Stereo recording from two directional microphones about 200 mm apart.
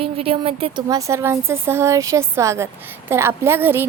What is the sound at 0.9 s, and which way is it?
A woman's voice, 15° right (ahead or behind).